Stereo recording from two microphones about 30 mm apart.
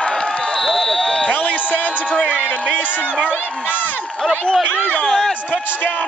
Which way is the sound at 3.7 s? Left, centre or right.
Left.